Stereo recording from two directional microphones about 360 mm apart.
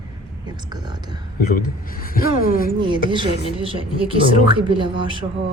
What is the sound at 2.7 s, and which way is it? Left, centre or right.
Speech, centre.